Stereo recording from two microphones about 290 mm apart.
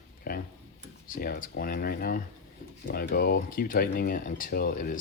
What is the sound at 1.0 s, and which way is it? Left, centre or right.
Speech, left.